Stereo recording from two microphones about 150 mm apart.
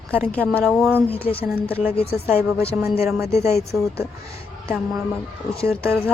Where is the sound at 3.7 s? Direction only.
5° right (ahead or behind).